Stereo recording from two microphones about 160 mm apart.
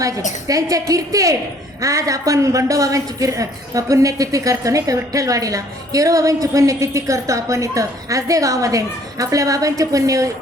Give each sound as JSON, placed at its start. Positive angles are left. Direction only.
{"t": 0.4, "sound": "a woman's voice", "side_deg": -20}